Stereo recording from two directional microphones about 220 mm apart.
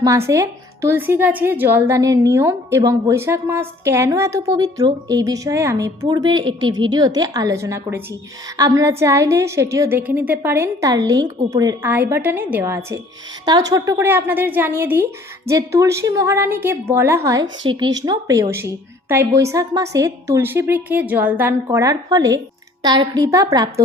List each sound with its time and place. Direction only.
0.0 s a woman's voice: 15° right (ahead or behind)